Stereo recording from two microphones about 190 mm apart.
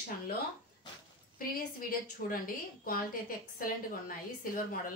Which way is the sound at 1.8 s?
50° left (ahead or behind).